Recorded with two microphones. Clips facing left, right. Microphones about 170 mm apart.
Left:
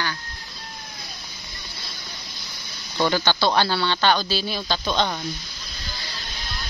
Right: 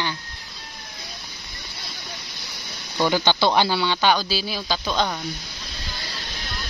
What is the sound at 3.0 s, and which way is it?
Speech, 15° right (ahead or behind).